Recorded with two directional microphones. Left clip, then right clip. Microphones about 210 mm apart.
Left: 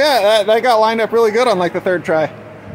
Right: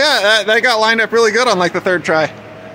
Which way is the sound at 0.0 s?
5° right (ahead or behind).